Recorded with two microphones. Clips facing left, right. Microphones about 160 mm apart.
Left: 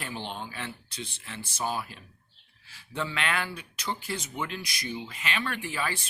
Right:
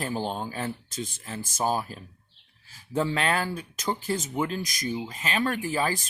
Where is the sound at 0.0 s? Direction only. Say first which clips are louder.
Right 7 dB; 40° right (ahead or behind).